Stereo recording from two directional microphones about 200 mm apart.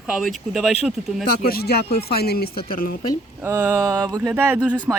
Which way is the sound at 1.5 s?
50° left (ahead or behind).